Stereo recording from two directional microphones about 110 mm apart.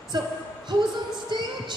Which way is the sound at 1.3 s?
40° right (ahead or behind).